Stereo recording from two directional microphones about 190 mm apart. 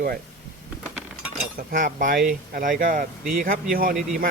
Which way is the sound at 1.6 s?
50° right (ahead or behind).